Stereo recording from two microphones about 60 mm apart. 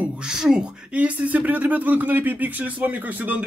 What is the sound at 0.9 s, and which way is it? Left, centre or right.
Speech, right.